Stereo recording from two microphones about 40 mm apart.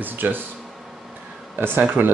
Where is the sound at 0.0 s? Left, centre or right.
Right.